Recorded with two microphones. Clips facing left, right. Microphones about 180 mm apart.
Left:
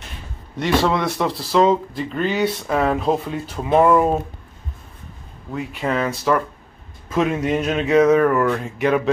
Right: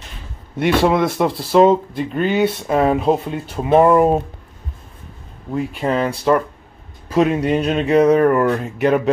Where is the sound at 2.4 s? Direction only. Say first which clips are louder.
Right 3 dB; 25° right (ahead or behind).